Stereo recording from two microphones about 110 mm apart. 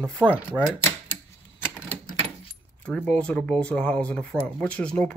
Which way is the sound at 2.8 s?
10° left (ahead or behind).